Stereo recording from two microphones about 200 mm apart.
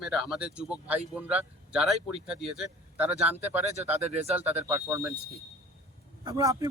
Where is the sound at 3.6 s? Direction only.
35° right (ahead or behind).